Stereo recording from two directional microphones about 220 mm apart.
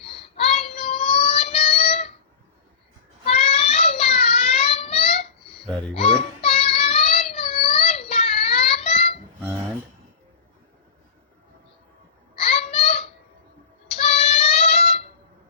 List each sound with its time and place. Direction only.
0.0 s child singing: 25° left (ahead or behind)
3.2 s child singing: 25° left (ahead or behind)
12.4 s a sound: 30° left (ahead or behind)
14.0 s child singing: 30° left (ahead or behind)